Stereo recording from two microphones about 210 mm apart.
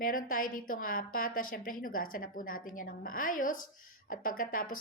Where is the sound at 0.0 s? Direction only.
40° left (ahead or behind).